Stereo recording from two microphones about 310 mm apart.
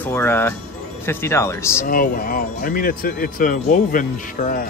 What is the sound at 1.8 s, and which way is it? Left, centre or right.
Speech, left.